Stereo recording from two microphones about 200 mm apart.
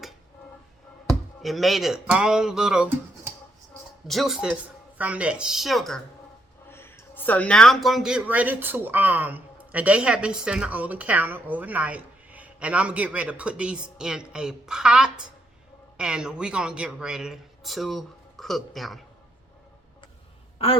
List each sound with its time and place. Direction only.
1.0 s speech: centre (ahead or behind)
4.0 s speech: centre (ahead or behind)
6.7 s speech: 10° left (ahead or behind)
20.6 s a woman's voice: 30° left (ahead or behind)